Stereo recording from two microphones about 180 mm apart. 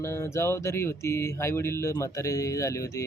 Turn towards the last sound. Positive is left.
turn(degrees=15)  # may be behind; listen again after turning